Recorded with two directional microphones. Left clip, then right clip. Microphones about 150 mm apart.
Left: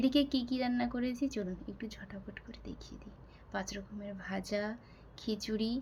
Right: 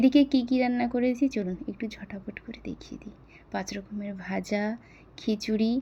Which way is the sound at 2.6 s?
20° right (ahead or behind).